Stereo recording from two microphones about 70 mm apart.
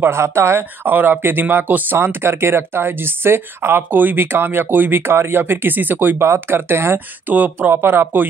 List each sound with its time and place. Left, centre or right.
0.0 s speech: right
7.3 s speech: right